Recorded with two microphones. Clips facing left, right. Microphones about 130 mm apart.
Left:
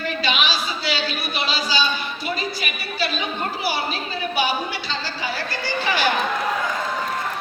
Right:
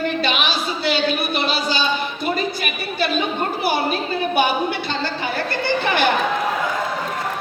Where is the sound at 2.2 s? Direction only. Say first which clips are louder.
Right 4 dB; 55° right (ahead or behind).